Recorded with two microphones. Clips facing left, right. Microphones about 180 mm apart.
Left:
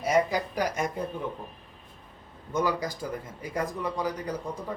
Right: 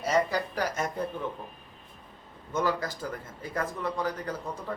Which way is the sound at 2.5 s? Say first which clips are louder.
Left 1 dB; 15° left (ahead or behind).